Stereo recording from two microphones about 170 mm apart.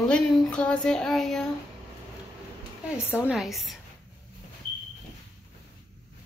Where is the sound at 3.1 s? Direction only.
5° right (ahead or behind).